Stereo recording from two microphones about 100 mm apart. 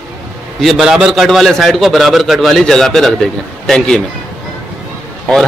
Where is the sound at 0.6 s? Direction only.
Centre (ahead or behind).